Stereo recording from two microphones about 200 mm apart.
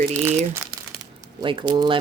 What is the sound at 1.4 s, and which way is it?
Speech, 25° right (ahead or behind).